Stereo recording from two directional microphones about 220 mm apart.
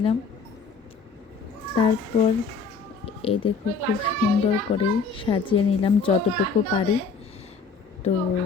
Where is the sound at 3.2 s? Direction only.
25° left (ahead or behind).